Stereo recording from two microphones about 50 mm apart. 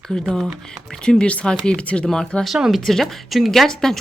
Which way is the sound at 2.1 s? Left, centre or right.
Centre.